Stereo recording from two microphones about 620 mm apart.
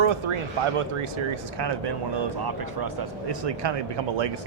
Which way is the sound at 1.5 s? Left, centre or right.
Right.